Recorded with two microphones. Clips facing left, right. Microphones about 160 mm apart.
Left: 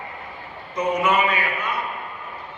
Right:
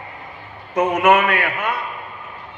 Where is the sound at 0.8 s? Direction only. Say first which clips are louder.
Right 5 dB; 85° right.